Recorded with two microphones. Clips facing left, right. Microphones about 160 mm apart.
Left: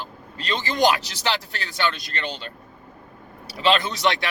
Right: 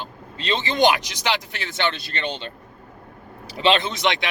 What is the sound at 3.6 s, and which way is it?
Speech, 25° right (ahead or behind).